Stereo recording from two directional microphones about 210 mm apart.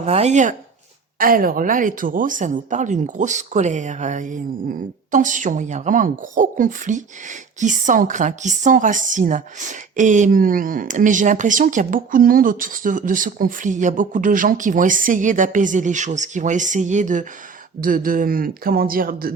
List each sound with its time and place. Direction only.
0.0 s a woman's voice: 30° right (ahead or behind)